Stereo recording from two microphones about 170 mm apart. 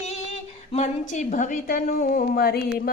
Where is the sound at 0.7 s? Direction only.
45° left (ahead or behind).